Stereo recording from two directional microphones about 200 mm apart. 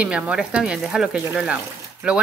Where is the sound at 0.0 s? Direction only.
5° right (ahead or behind).